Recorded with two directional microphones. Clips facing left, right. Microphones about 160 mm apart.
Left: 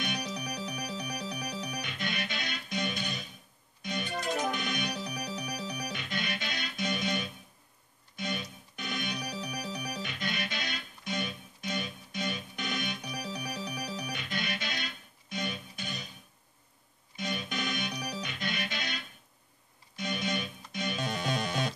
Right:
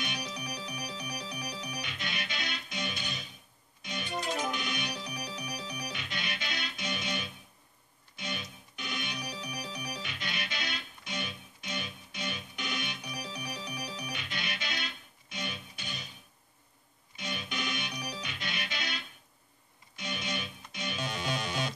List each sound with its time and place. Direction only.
0.0 s music: 45° left (ahead or behind)
8.3 s organ: 45° left (ahead or behind)
10.0 s music: 45° left (ahead or behind)
17.2 s music: 45° left (ahead or behind)